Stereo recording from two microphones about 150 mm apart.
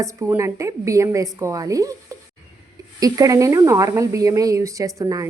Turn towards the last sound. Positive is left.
turn(degrees=-25)  # may be behind; listen again after turning